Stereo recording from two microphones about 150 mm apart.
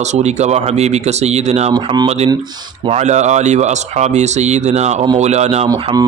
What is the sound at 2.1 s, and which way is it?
Speech, 45° right (ahead or behind).